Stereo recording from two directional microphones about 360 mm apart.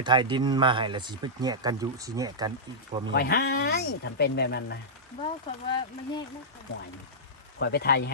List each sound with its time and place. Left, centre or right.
0.0 s speech: centre
3.1 s speech: left
5.2 s speech: centre
7.6 s speech: left